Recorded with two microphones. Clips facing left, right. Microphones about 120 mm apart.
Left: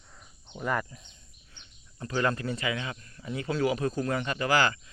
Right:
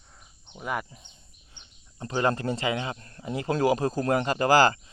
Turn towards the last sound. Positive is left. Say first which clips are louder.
# right 6 dB
turn(degrees=-35)  # may be behind; listen again after turning